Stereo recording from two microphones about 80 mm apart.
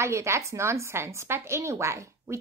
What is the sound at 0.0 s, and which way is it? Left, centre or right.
A woman's voice, right.